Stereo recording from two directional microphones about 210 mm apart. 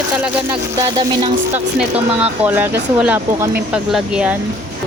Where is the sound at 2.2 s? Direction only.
10° right (ahead or behind).